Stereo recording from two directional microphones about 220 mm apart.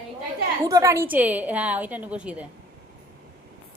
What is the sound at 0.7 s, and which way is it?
A woman's voice, 15° right (ahead or behind).